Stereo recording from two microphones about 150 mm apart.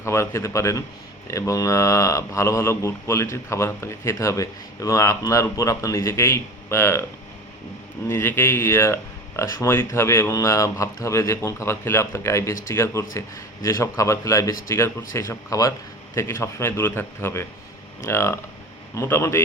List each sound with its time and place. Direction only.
0.0 s a man's voice: 15° left (ahead or behind)
8.1 s a man's voice: 15° left (ahead or behind)